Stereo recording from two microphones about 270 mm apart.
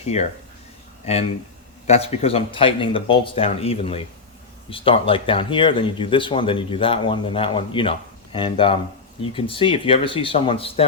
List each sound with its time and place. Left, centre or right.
0.1 s speech: left